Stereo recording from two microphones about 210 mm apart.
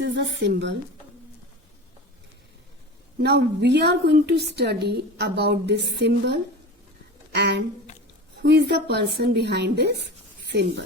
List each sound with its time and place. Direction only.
0.0 s speech: 55° right (ahead or behind)
3.2 s a woman's voice: 55° right (ahead or behind)
10.4 s writing: 55° right (ahead or behind)